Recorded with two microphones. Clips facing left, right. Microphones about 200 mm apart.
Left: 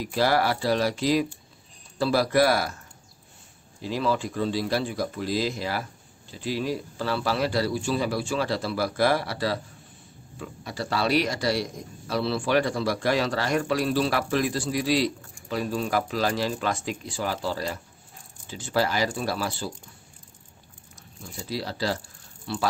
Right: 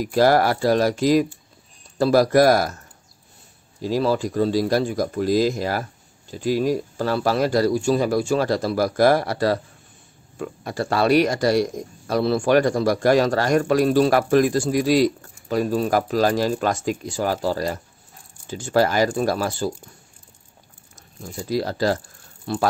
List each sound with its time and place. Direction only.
0.0 s speech: 45° right (ahead or behind)
3.8 s speech: 40° right (ahead or behind)
21.2 s speech: 45° right (ahead or behind)